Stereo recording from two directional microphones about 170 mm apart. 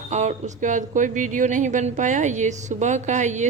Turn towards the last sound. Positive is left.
turn(degrees=-45)  # may be behind; listen again after turning